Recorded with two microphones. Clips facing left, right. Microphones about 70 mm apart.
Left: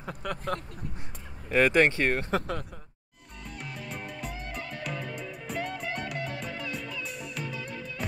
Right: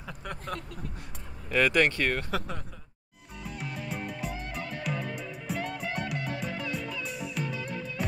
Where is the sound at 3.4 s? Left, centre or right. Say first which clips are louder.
Right 3 dB; centre.